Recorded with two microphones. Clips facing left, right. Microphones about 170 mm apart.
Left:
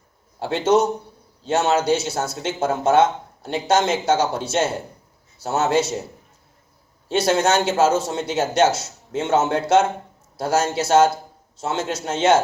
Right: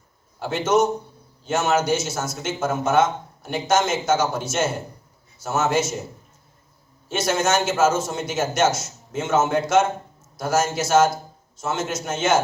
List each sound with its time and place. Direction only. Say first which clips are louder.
0.3 s speech: left 2 dB; 30° left (ahead or behind)
7.1 s speech: left 3 dB; 30° left (ahead or behind)